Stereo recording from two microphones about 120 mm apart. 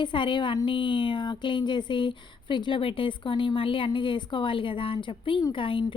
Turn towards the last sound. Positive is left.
turn(degrees=45)  # may be behind; listen again after turning